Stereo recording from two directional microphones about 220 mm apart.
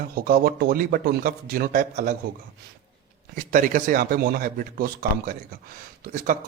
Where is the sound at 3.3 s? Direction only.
40° right (ahead or behind).